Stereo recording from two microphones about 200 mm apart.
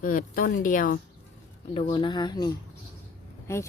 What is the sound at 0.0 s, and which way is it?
Speech, 45° left (ahead or behind).